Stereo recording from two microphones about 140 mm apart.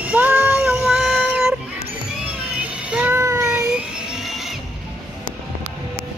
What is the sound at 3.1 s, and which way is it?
Child singing, 20° right (ahead or behind).